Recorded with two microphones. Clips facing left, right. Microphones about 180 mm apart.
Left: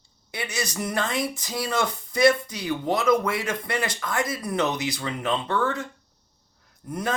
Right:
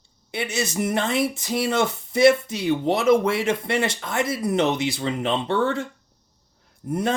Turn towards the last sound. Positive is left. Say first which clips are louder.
# right 5 dB
turn(degrees=-25)  # may be behind; listen again after turning